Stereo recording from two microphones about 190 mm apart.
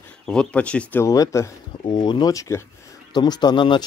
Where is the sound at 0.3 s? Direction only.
5° left (ahead or behind).